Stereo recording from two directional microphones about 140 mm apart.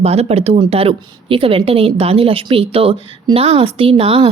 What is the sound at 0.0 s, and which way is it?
A woman's voice, 50° right (ahead or behind).